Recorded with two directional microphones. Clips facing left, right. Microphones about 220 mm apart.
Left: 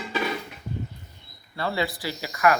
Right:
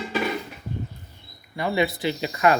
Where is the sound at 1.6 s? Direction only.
20° right (ahead or behind).